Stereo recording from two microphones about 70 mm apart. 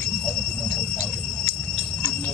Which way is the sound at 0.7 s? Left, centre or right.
Centre.